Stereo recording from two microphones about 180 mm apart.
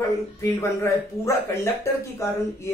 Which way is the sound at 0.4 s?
15° left (ahead or behind).